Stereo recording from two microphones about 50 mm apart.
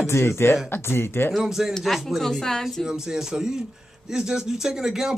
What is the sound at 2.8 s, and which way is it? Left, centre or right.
Speech, centre.